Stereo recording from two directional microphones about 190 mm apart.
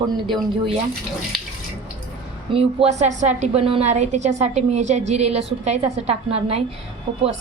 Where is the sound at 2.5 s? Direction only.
35° right (ahead or behind).